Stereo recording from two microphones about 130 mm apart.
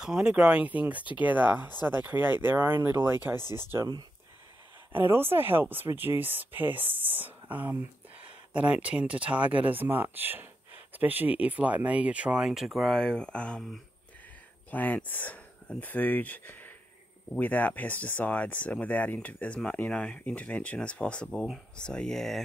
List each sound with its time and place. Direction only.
0.0 s speech: 5° right (ahead or behind)
3.7 s speech: 30° right (ahead or behind)
4.9 s speech: 15° right (ahead or behind); by 22.4 s 5° left (ahead or behind)